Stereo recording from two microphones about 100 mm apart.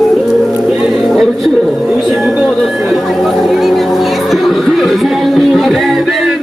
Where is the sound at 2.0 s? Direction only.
Centre (ahead or behind).